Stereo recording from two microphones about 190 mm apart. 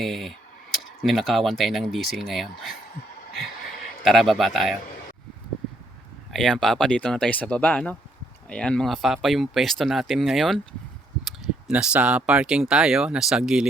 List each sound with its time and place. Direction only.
0.0 s speech: centre (ahead or behind)
4.0 s speech: centre (ahead or behind)
6.3 s speech: centre (ahead or behind)
11.7 s speech: 5° right (ahead or behind)